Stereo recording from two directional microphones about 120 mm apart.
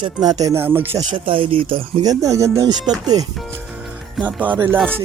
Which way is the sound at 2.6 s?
35° right (ahead or behind).